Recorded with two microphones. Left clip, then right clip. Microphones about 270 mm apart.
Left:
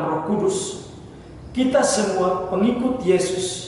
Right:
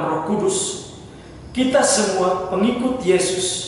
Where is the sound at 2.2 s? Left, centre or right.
Centre.